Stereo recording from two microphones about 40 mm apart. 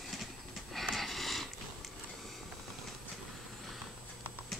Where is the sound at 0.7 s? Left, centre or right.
Centre.